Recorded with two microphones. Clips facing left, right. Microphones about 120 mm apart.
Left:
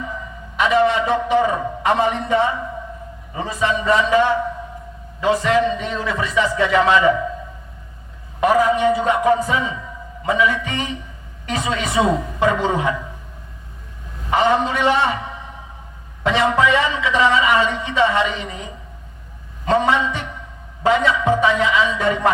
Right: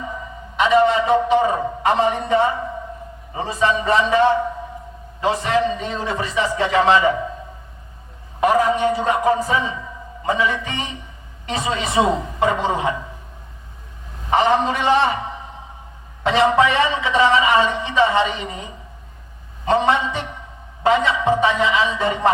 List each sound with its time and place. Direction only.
0.6 s a man's voice: 30° right (ahead or behind)
8.4 s a man's voice: 35° right (ahead or behind)
14.3 s a man's voice: 35° right (ahead or behind)
16.2 s a man's voice: 35° right (ahead or behind)
20.9 s a sound: 30° right (ahead or behind)